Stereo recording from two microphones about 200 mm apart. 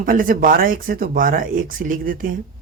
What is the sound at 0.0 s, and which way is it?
Speech, 45° right (ahead or behind).